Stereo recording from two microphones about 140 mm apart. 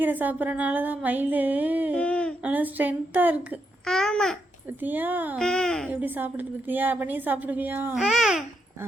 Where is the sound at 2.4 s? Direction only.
10° right (ahead or behind).